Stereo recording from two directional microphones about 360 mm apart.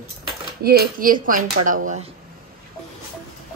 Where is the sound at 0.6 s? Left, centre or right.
Right.